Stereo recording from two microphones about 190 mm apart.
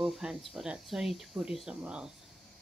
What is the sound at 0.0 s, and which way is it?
Speech, centre (ahead or behind).